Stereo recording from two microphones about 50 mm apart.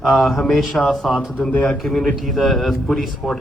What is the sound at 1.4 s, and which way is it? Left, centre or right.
Speech, left.